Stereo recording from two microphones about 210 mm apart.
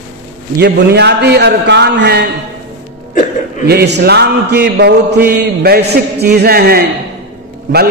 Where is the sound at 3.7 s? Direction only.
50° right (ahead or behind).